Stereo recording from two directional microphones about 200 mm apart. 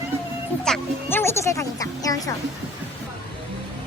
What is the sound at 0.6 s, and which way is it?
Music, 5° left (ahead or behind).